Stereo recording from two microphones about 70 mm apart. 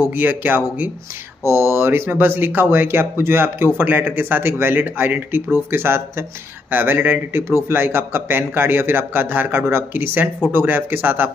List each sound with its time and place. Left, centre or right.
0.0 s speech: right
1.4 s speech: right